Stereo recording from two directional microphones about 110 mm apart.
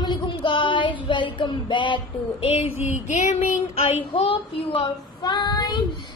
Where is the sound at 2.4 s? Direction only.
65° left (ahead or behind).